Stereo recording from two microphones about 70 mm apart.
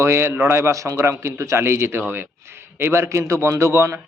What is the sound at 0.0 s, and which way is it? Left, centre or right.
A man's voice, right.